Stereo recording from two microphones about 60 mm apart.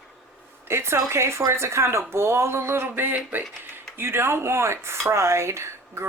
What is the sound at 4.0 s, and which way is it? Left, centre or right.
Speech, right.